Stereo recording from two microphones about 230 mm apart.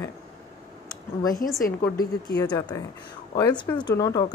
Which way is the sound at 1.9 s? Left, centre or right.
Left.